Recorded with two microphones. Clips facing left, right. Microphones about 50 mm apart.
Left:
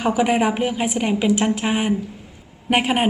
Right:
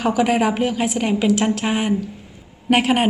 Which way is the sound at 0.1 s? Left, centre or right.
Centre.